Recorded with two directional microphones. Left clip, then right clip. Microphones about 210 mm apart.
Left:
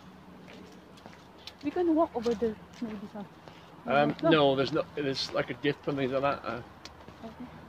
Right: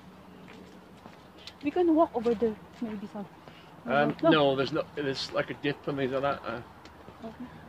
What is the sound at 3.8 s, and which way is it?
Speech, 20° left (ahead or behind).